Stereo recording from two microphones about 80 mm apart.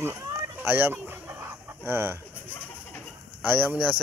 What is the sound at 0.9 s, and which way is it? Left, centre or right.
Chicken, right.